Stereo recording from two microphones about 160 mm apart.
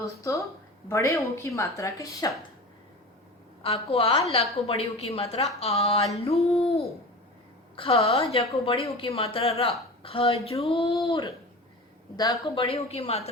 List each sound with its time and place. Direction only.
0.0 s speech: 20° left (ahead or behind)
3.6 s a woman's voice: 35° left (ahead or behind)
6.6 s hoot: 40° left (ahead or behind)
7.8 s a woman's voice: 35° left (ahead or behind)
12.1 s speech: 25° left (ahead or behind)
12.5 s a woman's voice: 35° left (ahead or behind)